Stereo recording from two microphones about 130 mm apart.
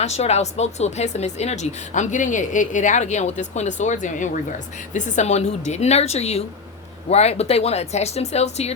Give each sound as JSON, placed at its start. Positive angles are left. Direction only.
{"t": 0.0, "sound": "speech", "side_deg": 55}